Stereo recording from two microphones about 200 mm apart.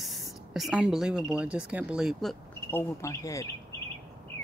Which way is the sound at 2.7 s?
15° left (ahead or behind).